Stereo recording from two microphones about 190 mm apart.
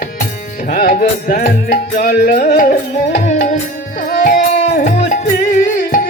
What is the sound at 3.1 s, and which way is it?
Music, 40° left (ahead or behind).